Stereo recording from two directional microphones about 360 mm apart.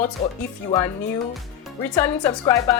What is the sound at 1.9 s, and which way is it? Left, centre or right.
Speech, centre.